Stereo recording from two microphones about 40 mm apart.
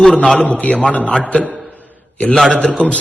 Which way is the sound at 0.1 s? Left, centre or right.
Left.